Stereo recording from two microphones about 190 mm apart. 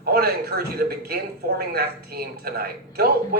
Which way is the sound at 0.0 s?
55° right (ahead or behind).